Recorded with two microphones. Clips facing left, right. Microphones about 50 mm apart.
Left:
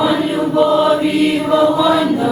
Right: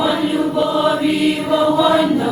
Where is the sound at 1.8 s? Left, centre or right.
Centre.